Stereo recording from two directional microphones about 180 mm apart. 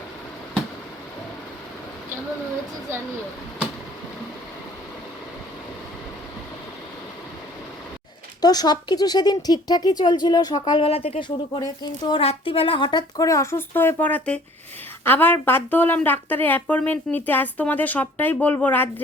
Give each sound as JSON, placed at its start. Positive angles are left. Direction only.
{"t": 8.4, "sound": "speech", "side_deg": 20}